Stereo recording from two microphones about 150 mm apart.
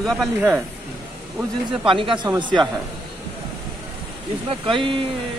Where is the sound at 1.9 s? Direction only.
35° right (ahead or behind).